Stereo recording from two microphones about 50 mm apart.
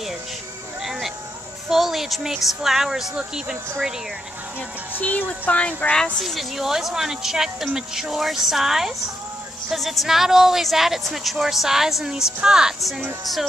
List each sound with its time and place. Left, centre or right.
1.7 s speech: centre
5.4 s speech: left
6.1 s a woman's voice: centre
13.2 s a woman's voice: centre